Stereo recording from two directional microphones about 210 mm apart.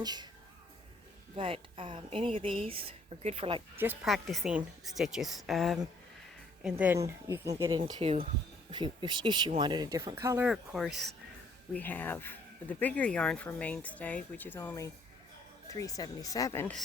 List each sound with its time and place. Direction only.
0.0 s speech: 20° right (ahead or behind)
1.4 s speech: 25° right (ahead or behind)
3.8 s a woman's voice: 5° right (ahead or behind)
11.7 s speech: 10° left (ahead or behind)